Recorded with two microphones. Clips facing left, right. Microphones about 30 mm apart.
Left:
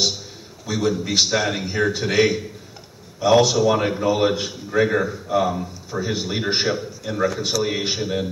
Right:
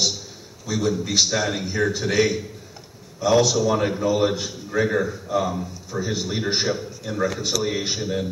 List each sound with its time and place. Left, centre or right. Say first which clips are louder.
0.7 s a man's voice: left 1 dB; centre